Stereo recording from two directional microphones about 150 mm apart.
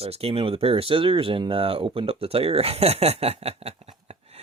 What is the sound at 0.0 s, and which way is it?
Speech, 40° right (ahead or behind).